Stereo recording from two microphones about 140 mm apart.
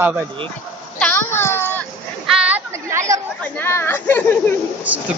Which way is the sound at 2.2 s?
5° right (ahead or behind).